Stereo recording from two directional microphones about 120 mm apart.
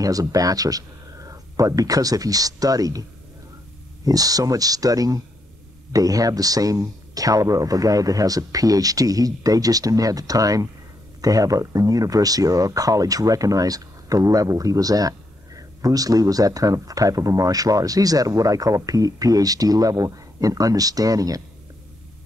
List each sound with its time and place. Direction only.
0.0 s speech: 30° right (ahead or behind)